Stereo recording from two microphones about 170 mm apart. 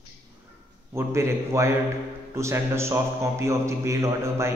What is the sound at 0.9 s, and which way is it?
A man's voice, 15° right (ahead or behind).